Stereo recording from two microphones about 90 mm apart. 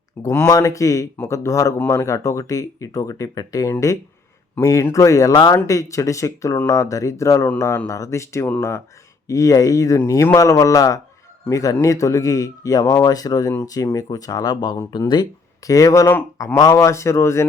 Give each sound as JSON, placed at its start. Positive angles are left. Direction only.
{"t": 0.2, "sound": "speech", "side_deg": 30}
{"t": 5.3, "sound": "speech", "side_deg": 60}
{"t": 5.6, "sound": "speech", "side_deg": 35}